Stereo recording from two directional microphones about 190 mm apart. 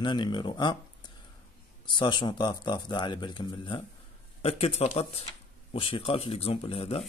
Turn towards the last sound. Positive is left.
turn(degrees=30)  # may be behind; listen again after turning